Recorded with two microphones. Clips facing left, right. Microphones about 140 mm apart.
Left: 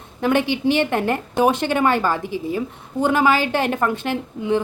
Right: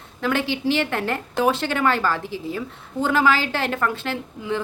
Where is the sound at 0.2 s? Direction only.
20° left (ahead or behind).